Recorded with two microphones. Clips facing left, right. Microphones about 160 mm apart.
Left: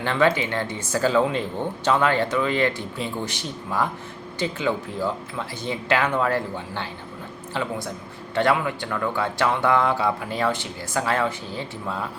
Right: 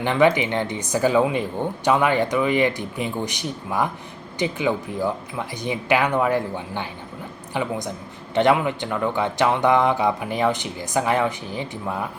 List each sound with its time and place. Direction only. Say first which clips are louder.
0.0 s speech: right 3 dB; 15° right (ahead or behind)